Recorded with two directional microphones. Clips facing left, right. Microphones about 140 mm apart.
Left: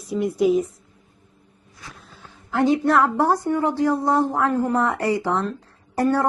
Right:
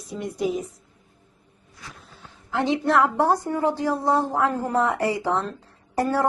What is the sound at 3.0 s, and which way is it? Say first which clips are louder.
Speech: left 1 dB; 25° right (ahead or behind).